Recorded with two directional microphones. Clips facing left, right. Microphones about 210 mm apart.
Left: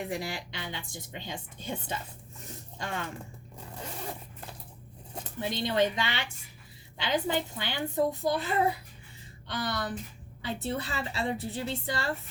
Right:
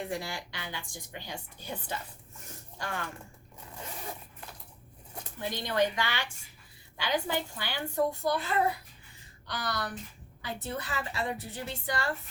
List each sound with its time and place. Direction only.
0.1 s speech: 20° left (ahead or behind)
5.4 s speech: 20° left (ahead or behind)